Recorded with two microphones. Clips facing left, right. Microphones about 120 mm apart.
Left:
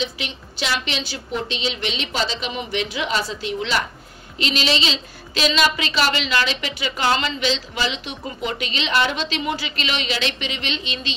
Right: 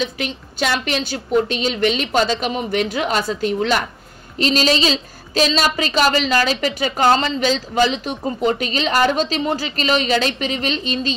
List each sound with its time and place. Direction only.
0.0 s a woman's voice: 50° right (ahead or behind)